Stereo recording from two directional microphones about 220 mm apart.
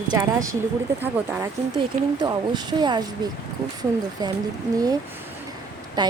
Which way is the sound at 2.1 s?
20° right (ahead or behind).